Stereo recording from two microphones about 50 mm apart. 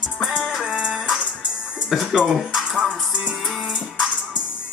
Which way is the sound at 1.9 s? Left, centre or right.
Centre.